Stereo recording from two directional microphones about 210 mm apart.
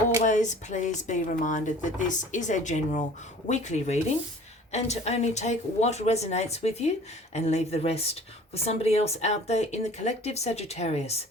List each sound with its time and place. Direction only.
0.3 s speech: 35° left (ahead or behind)